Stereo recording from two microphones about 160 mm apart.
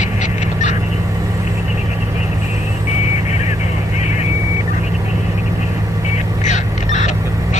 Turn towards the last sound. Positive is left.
turn(degrees=50)  # may be behind; listen again after turning